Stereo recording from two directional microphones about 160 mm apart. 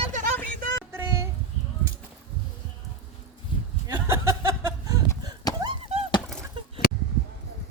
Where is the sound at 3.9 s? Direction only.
20° right (ahead or behind).